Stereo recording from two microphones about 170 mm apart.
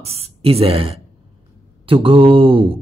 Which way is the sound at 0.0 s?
35° right (ahead or behind).